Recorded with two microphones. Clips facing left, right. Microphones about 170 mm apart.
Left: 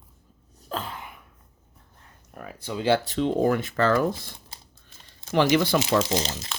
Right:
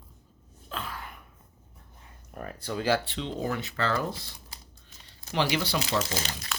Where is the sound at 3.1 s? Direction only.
50° left (ahead or behind).